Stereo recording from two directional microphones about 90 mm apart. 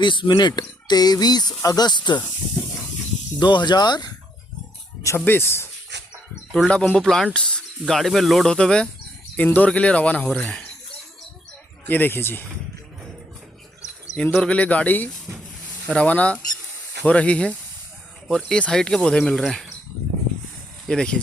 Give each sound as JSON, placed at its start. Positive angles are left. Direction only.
{"t": 0.0, "sound": "speech", "side_deg": 65}
{"t": 3.4, "sound": "speech", "side_deg": 55}
{"t": 5.0, "sound": "speech", "side_deg": 25}
{"t": 6.7, "sound": "speech", "side_deg": 5}
{"t": 11.9, "sound": "speech", "side_deg": 20}
{"t": 14.3, "sound": "speech", "side_deg": 15}
{"t": 20.8, "sound": "speech", "side_deg": 10}